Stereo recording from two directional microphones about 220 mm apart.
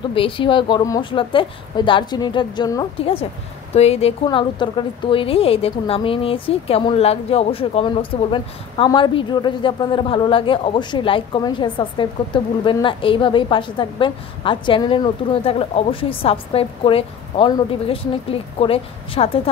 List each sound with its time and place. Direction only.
0.1 s a woman's voice: 25° left (ahead or behind)